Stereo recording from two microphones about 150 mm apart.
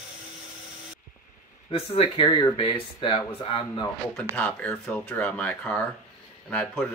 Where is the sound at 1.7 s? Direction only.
40° left (ahead or behind).